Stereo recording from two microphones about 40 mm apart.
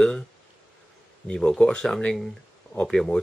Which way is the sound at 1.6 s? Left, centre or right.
Centre.